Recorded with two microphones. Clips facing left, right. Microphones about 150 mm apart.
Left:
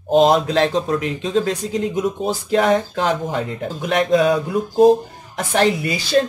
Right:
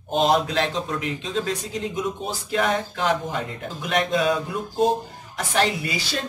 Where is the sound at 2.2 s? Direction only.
40° left (ahead or behind).